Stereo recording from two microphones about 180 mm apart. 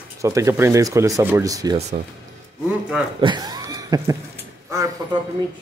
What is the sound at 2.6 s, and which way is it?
Speech, 5° right (ahead or behind).